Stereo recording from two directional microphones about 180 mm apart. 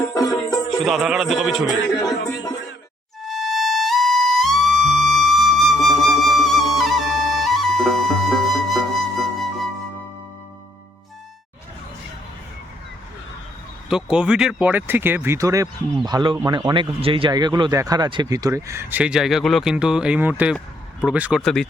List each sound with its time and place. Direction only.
0.1 s speech: 20° left (ahead or behind)
0.9 s a man's voice: centre (ahead or behind)
2.2 s speech: 20° left (ahead or behind)
3.2 s music: centre (ahead or behind)
5.1 s flute: centre (ahead or behind)
13.9 s a man's voice: 5° right (ahead or behind)